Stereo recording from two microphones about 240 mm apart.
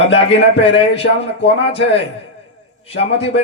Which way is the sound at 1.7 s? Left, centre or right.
Left.